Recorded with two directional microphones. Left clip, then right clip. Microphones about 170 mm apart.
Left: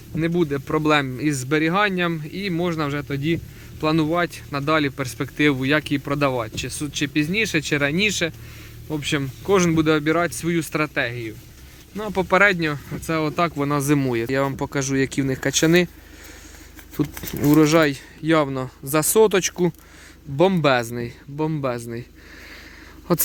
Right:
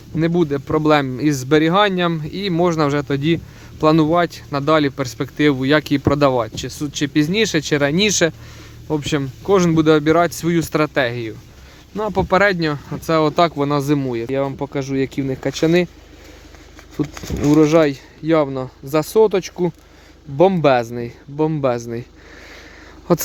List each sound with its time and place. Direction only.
0.2 s speech: 25° right (ahead or behind); by 3.4 s 40° right (ahead or behind)
3.8 s speech: 30° right (ahead or behind)
9.2 s speech: 15° right (ahead or behind)
13.6 s speech: 10° right (ahead or behind)
17.0 s speech: centre (ahead or behind)
23.1 s speech: 15° right (ahead or behind)